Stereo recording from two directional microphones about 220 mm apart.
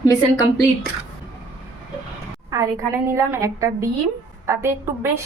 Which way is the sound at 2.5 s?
15° right (ahead or behind).